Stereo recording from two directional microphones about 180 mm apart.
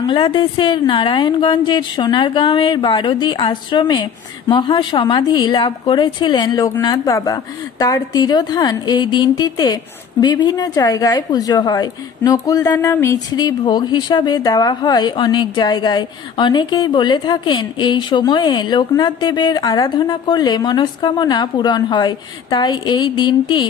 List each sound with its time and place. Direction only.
0.0 s a woman's voice: 25° left (ahead or behind)